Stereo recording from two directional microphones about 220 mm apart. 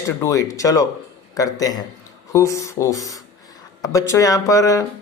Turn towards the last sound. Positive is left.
turn(degrees=15)  # may be behind; listen again after turning